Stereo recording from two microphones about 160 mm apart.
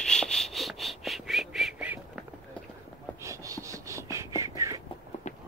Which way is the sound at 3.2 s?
20° right (ahead or behind).